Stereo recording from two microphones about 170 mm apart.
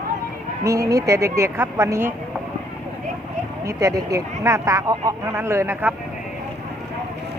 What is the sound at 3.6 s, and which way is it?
Speech, 20° right (ahead or behind).